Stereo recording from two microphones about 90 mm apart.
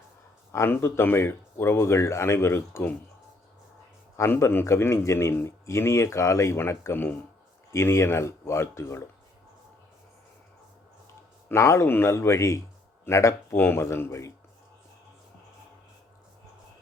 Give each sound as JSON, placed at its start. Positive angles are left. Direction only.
{"t": 0.5, "sound": "speech", "side_deg": 25}
{"t": 4.2, "sound": "a man's voice", "side_deg": 30}
{"t": 11.4, "sound": "a man's voice", "side_deg": 30}